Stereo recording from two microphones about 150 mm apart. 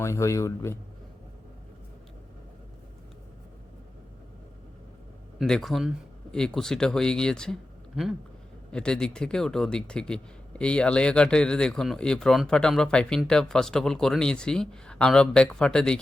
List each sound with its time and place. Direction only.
0.0 s speech: 20° left (ahead or behind)
5.4 s speech: centre (ahead or behind)